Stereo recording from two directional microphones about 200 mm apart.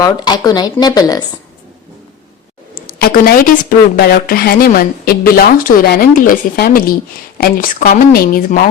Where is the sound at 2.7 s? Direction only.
45° left (ahead or behind).